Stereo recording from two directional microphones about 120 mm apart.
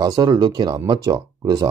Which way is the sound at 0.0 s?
30° right (ahead or behind).